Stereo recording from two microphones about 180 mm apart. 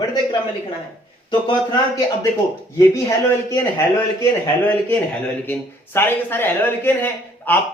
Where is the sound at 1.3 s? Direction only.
25° left (ahead or behind).